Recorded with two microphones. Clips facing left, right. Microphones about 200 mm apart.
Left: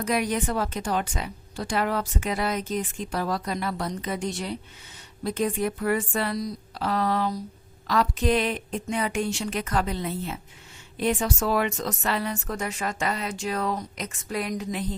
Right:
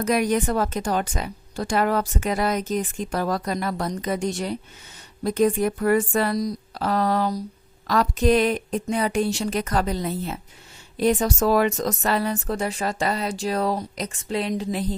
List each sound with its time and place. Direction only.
0.0 s a woman's voice: 45° right (ahead or behind)